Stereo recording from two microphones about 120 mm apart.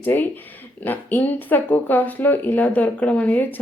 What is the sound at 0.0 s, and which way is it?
Speech, 15° left (ahead or behind).